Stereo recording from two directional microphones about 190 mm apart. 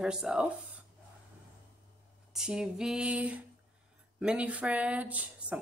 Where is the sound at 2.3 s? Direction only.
5° right (ahead or behind).